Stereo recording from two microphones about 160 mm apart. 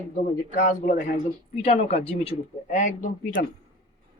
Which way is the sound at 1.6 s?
40° left (ahead or behind).